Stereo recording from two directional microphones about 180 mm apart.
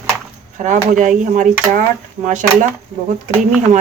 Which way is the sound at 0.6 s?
45° right (ahead or behind).